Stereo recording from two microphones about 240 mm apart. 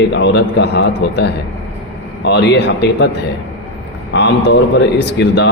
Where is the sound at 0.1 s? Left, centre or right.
Left.